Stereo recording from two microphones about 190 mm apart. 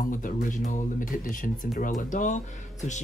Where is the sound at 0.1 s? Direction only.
45° left (ahead or behind).